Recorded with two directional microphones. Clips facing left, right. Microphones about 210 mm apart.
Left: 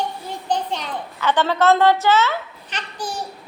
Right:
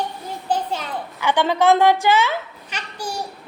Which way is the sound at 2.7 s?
10° right (ahead or behind).